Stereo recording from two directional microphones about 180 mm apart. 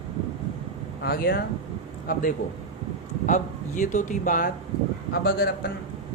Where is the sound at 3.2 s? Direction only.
45° left (ahead or behind).